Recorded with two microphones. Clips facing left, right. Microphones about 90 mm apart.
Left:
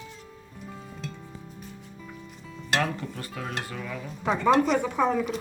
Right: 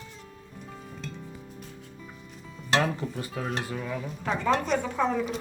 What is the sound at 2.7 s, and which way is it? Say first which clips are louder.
Stir: right 2 dB; 15° right (ahead or behind).